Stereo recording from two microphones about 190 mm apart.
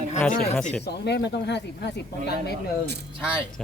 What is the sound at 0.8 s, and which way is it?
Speech, 60° left (ahead or behind).